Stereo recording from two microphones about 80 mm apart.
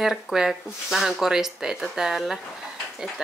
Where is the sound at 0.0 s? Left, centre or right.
Centre.